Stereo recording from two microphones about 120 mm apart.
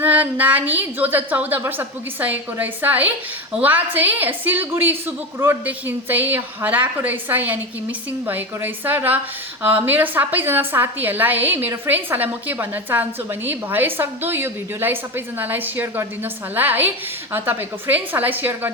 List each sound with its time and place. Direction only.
0.0 s a woman's voice: 15° right (ahead or behind)